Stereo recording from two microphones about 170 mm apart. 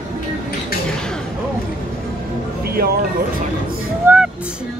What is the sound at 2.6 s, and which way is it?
Music, 65° right (ahead or behind).